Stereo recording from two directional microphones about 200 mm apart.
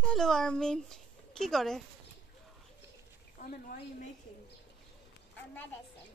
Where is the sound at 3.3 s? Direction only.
40° left (ahead or behind).